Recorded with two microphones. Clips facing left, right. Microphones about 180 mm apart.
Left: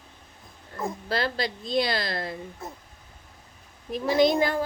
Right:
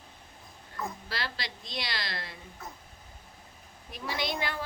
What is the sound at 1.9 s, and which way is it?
Speech, 45° left (ahead or behind).